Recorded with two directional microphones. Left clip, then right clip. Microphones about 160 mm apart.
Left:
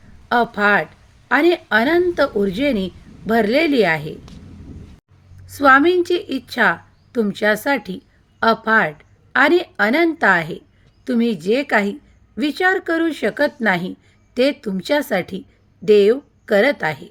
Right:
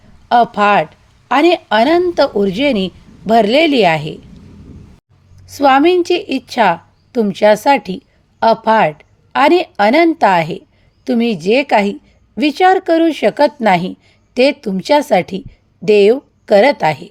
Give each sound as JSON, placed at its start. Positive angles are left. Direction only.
{"t": 0.3, "sound": "a woman's voice", "side_deg": -40}
{"t": 5.5, "sound": "a woman's voice", "side_deg": -40}